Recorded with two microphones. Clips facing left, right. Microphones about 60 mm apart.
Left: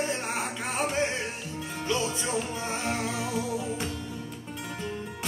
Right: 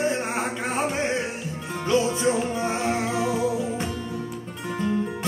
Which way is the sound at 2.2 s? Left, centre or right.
Right.